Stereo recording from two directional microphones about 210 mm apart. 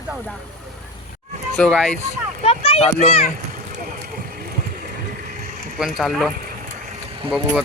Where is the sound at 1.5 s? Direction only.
5° left (ahead or behind).